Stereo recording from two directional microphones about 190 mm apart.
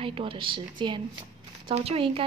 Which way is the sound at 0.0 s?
30° right (ahead or behind).